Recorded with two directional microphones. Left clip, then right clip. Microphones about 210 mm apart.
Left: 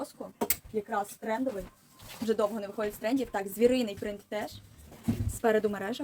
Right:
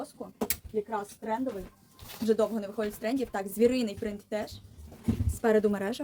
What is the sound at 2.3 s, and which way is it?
A woman's voice, 15° right (ahead or behind).